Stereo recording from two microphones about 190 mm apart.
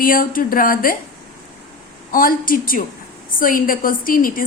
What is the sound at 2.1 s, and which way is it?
A woman's voice, 45° left (ahead or behind).